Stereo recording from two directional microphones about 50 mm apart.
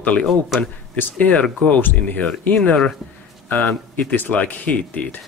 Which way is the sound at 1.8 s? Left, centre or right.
Left.